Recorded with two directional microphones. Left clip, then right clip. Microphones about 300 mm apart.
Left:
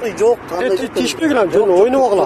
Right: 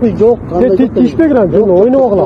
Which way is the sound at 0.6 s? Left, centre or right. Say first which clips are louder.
Right 7 dB; left.